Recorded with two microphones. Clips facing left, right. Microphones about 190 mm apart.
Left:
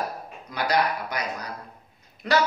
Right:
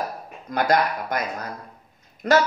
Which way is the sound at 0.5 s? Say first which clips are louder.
Right 3 dB; 50° right (ahead or behind).